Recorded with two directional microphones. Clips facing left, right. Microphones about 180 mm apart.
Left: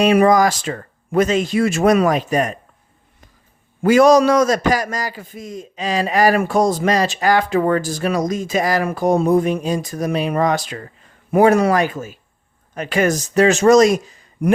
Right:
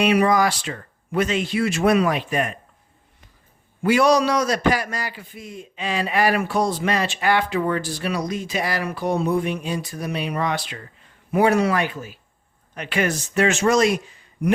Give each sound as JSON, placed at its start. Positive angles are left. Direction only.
{"t": 0.0, "sound": "a man's voice", "side_deg": 45}
{"t": 3.8, "sound": "a man's voice", "side_deg": 45}